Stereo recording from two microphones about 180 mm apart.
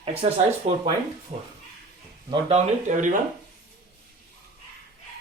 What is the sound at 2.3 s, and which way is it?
Speech, 35° right (ahead or behind).